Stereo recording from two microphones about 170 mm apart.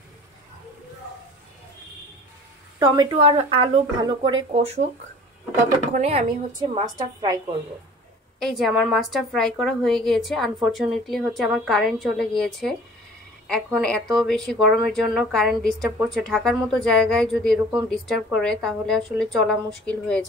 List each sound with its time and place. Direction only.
2.8 s speech: 25° right (ahead or behind)
4.5 s speech: 40° right (ahead or behind)
5.9 s speech: 40° right (ahead or behind)
6.7 s speech: 25° right (ahead or behind)
8.4 s a woman's voice: centre (ahead or behind)